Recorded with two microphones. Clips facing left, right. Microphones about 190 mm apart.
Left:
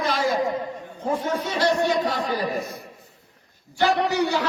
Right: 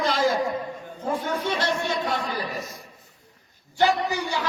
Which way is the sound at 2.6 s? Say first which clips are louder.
Left 5 dB; 60° left (ahead or behind).